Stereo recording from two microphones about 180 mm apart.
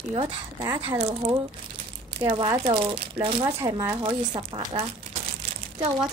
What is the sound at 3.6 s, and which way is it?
Speech, 15° right (ahead or behind).